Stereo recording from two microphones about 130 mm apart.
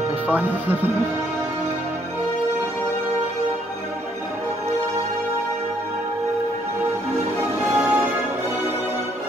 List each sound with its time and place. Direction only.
0.3 s speech: 15° right (ahead or behind)
7.7 s music: 20° right (ahead or behind)